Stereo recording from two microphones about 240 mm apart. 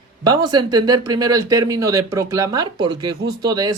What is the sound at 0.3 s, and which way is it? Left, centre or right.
Speech, centre.